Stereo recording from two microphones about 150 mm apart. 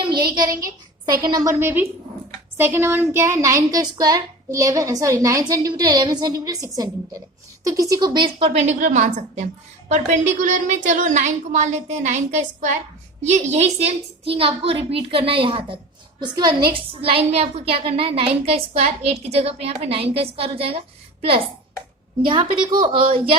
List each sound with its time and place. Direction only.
0.0 s a child's voice: 30° right (ahead or behind)